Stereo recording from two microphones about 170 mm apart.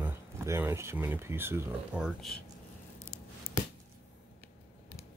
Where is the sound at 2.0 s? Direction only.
Centre (ahead or behind).